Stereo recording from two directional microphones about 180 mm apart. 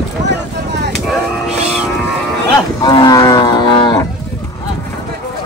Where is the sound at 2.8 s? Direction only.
20° left (ahead or behind).